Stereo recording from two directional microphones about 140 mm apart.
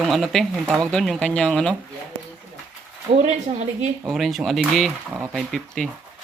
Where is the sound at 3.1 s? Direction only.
50° right (ahead or behind).